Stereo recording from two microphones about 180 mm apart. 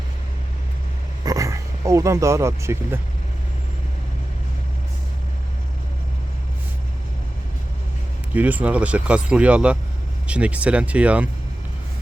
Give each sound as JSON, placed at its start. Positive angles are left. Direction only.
{"t": 1.2, "sound": "speech", "side_deg": -20}
{"t": 8.3, "sound": "speech", "side_deg": -10}